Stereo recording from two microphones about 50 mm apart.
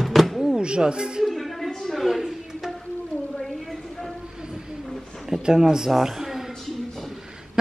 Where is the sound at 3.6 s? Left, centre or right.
Centre.